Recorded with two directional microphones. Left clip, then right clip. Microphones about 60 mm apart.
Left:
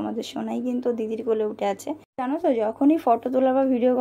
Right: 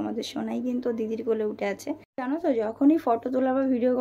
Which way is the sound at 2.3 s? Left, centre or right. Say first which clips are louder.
Left 3 dB; left.